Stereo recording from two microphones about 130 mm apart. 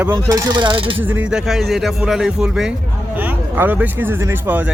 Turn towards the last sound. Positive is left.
turn(degrees=-15)  # may be behind; listen again after turning